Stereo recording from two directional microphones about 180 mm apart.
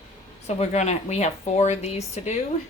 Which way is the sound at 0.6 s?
40° left (ahead or behind).